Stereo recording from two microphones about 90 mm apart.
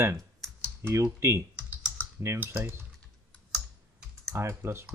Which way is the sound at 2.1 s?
25° right (ahead or behind).